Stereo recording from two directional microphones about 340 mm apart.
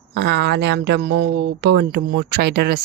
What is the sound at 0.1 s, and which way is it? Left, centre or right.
Speech, right.